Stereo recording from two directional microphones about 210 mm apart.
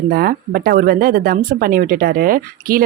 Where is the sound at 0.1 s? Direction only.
45° right (ahead or behind).